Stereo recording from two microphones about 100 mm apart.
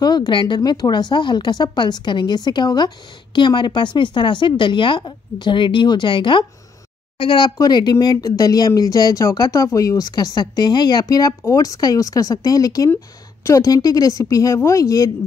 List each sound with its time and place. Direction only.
0.0 s a woman's voice: 45° left (ahead or behind)
7.5 s speech: 40° left (ahead or behind)